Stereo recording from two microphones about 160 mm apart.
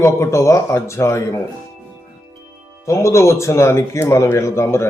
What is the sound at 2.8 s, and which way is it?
Speech, 20° left (ahead or behind).